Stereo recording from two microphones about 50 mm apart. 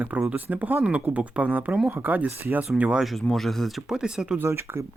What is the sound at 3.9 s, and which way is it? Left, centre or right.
Speech, centre.